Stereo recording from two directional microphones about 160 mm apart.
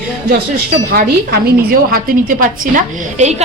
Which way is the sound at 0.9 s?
75° right (ahead or behind).